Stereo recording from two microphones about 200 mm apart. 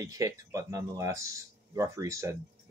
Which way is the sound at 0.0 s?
15° right (ahead or behind).